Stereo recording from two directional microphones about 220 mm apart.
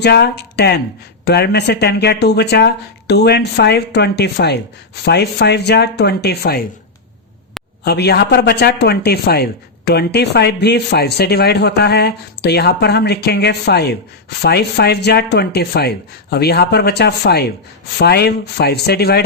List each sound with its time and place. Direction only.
0.0 s speech: 50° left (ahead or behind)
7.9 s speech: 45° left (ahead or behind)